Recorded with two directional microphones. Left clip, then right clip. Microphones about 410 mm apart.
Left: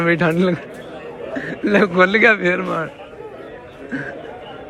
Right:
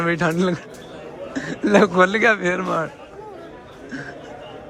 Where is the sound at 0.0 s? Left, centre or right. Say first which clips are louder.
Left 4 dB; centre.